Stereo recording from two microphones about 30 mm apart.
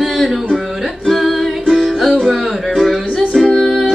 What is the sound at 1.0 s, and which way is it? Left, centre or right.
Music, centre.